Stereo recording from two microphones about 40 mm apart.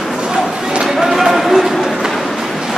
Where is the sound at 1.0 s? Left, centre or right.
Centre.